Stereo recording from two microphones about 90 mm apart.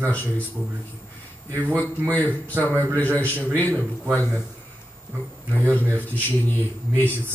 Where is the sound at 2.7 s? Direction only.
35° right (ahead or behind).